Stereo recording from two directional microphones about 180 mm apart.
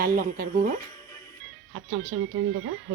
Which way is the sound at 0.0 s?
55° right (ahead or behind).